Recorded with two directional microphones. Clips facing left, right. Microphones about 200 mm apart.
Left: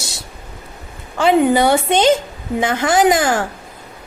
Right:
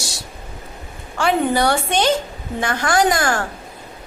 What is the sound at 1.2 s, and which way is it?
A woman's voice, 15° left (ahead or behind).